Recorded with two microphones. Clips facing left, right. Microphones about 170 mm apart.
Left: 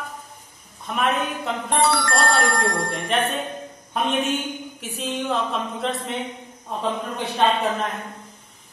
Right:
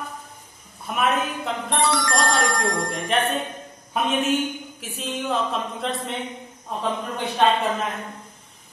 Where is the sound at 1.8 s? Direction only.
60° left (ahead or behind).